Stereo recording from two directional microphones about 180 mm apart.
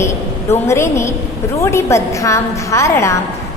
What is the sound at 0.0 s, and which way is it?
A woman's voice, 15° left (ahead or behind).